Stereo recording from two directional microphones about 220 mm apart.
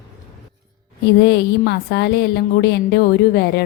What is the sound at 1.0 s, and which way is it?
Speech, 50° left (ahead or behind).